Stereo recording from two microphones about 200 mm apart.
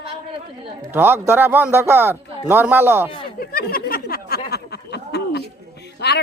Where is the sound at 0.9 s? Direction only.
10° right (ahead or behind).